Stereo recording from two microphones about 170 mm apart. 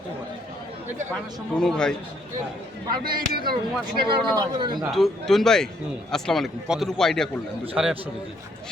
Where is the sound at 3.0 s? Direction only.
60° right (ahead or behind).